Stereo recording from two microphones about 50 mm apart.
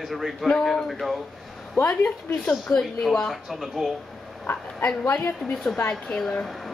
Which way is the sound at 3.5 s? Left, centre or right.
Centre.